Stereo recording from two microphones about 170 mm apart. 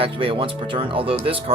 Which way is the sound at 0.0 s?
35° right (ahead or behind).